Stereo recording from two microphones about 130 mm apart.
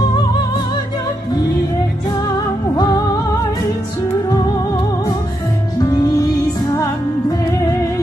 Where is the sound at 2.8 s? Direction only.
30° left (ahead or behind).